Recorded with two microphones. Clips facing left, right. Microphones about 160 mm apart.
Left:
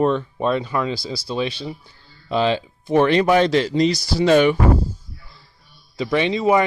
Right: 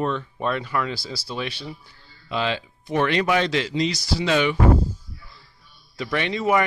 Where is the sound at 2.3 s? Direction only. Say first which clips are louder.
Left 6 dB; 30° left (ahead or behind).